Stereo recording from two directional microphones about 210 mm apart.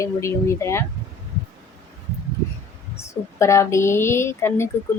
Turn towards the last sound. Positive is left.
turn(degrees=10)  # may be behind; listen again after turning